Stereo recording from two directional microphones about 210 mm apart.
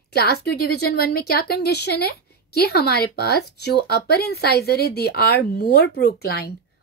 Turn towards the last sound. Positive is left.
turn(degrees=45)  # may be behind; listen again after turning